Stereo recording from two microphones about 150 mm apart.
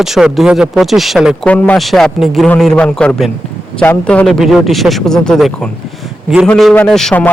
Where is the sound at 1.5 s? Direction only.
10° left (ahead or behind).